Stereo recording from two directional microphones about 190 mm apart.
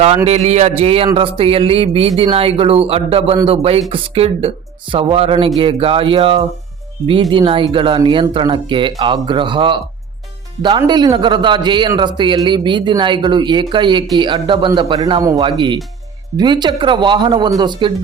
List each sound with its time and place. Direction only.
0.3 s a man's voice: 35° right (ahead or behind)